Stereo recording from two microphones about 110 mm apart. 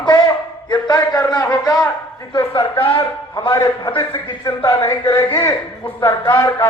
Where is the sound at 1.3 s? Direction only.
35° left (ahead or behind).